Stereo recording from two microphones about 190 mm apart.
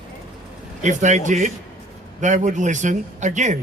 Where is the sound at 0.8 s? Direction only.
40° right (ahead or behind).